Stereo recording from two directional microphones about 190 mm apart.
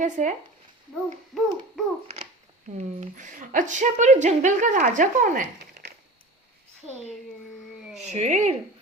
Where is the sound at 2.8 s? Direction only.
40° right (ahead or behind).